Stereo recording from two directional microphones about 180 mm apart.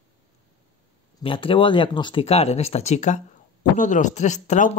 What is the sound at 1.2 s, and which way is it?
Speech, 30° left (ahead or behind).